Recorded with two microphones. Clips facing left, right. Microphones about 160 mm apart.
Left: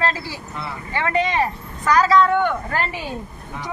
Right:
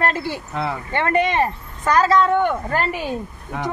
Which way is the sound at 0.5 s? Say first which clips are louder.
Right 4 dB; 90° right.